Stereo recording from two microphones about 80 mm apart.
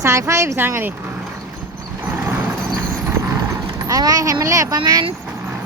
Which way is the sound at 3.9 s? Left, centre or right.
Right.